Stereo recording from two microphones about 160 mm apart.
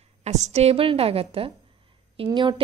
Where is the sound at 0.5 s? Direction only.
40° right (ahead or behind).